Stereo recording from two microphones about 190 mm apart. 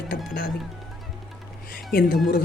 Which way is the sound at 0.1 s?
55° left (ahead or behind).